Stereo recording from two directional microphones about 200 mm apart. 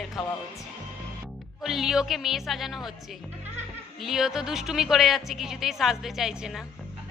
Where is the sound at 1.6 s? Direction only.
Centre (ahead or behind).